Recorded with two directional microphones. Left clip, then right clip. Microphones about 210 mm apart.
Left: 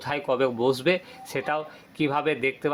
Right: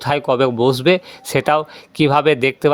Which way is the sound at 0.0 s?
50° right (ahead or behind).